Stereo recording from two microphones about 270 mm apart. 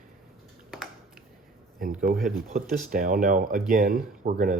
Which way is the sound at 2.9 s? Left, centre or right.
Right.